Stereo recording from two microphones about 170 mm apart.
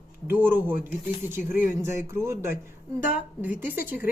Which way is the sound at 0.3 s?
10° right (ahead or behind).